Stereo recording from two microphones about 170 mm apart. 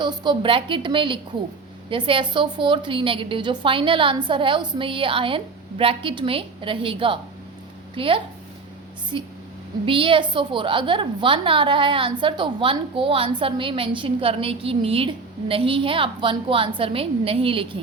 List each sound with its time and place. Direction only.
0.0 s a woman's voice: 25° right (ahead or behind)